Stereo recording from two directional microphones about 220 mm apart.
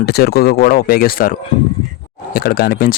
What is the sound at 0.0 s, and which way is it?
Speech, 45° left (ahead or behind).